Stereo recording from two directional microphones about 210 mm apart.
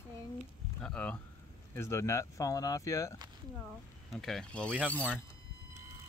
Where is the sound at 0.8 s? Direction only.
5° left (ahead or behind).